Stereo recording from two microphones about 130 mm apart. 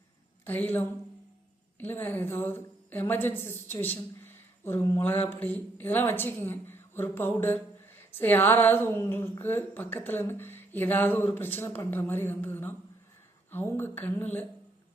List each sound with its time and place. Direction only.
0.4 s a woman's voice: 15° left (ahead or behind)